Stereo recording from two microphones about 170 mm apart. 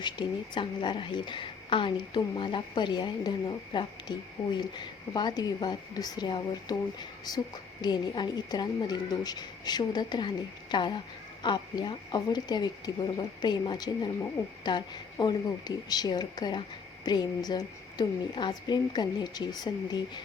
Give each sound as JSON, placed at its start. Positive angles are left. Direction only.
{"t": 0.0, "sound": "a woman's voice", "side_deg": 25}